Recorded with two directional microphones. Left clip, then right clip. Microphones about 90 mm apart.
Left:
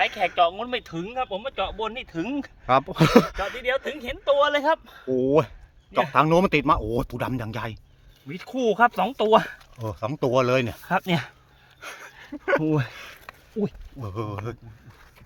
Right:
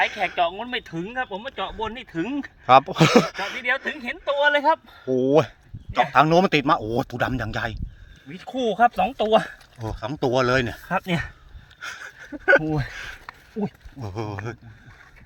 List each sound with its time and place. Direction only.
0.3 s speech: 40° left (ahead or behind)
2.6 s speech: 5° right (ahead or behind)
3.6 s speech: 50° left (ahead or behind)
4.0 s speech: 75° left (ahead or behind); by 5.0 s 90° left
5.0 s speech: 5° left (ahead or behind)
8.3 s speech: 40° left (ahead or behind)
9.5 s speech: 25° left (ahead or behind)
11.8 s a sound: 20° left (ahead or behind)
12.9 s speech: 5° left (ahead or behind)
14.0 s speech: 15° left (ahead or behind)